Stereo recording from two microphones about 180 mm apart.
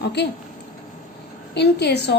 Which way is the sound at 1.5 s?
70° left (ahead or behind).